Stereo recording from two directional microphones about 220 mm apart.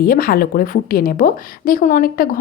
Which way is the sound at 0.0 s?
40° left (ahead or behind).